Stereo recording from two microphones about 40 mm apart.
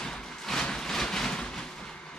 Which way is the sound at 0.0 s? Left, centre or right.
Centre.